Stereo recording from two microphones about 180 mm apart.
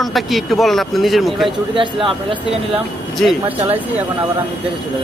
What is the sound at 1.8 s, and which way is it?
Speech, 30° right (ahead or behind).